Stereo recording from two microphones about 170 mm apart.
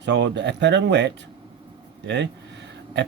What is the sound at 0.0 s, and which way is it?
A man's voice, 90° right.